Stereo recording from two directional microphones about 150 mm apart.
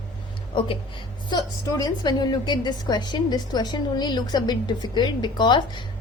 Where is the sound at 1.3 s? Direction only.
25° left (ahead or behind).